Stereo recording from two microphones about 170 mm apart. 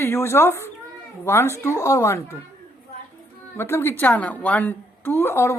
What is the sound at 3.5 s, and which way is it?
A woman's voice, 15° left (ahead or behind).